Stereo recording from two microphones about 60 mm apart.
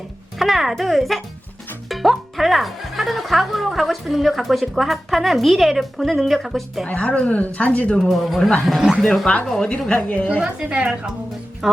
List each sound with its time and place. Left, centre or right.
0.3 s speech: centre
6.8 s speech: left
8.1 s speech: centre
9.2 s speech: left
10.4 s a woman's voice: centre
11.6 s speech: centre